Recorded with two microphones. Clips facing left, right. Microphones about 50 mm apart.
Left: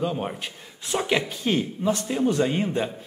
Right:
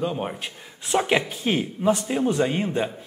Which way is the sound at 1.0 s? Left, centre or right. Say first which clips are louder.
Right 3 dB; centre.